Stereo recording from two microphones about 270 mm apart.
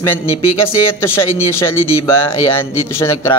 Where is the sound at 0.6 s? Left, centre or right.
Centre.